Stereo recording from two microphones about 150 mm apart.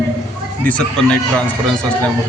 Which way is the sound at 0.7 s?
5° left (ahead or behind).